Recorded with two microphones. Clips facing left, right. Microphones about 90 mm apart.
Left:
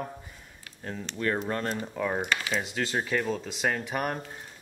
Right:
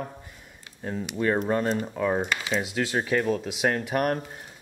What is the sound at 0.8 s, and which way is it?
A man's voice, 15° right (ahead or behind).